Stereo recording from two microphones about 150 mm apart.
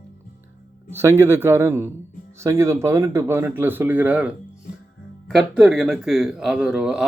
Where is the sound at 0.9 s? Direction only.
15° right (ahead or behind).